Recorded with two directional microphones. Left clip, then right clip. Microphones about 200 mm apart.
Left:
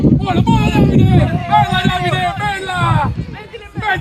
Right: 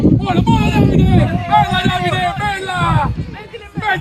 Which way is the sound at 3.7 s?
Centre (ahead or behind).